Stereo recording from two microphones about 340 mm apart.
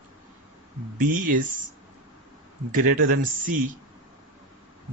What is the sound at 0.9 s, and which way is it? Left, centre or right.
Speech, right.